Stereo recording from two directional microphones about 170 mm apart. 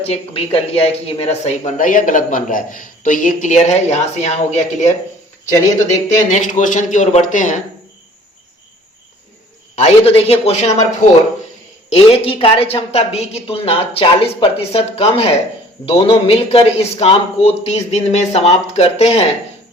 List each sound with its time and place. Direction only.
0.0 s speech: 35° left (ahead or behind)
6.3 s speech: 50° left (ahead or behind)
9.7 s speech: 35° left (ahead or behind)
11.9 s speech: 35° left (ahead or behind)